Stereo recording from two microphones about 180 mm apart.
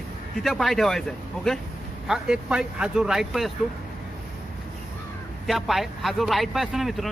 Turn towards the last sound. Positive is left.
turn(degrees=0)  # may be behind; listen again after turning